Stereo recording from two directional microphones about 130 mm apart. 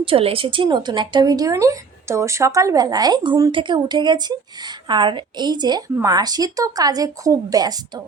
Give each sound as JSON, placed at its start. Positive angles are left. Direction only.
{"t": 0.0, "sound": "a woman's voice", "side_deg": -45}